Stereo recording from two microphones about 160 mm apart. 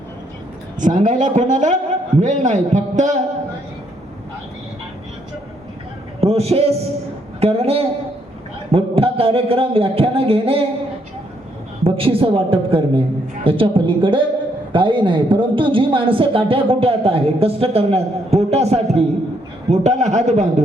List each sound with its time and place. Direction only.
0.8 s a man's voice: 50° right (ahead or behind)
6.1 s a man's voice: 40° right (ahead or behind)
11.8 s a man's voice: 35° right (ahead or behind)